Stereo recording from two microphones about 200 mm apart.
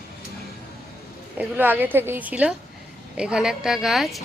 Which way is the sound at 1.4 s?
10° right (ahead or behind).